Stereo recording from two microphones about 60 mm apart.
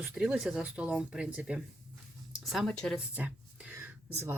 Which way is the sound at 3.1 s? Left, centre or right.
Right.